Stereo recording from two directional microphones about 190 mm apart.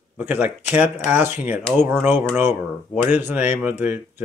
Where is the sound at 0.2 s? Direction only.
10° right (ahead or behind).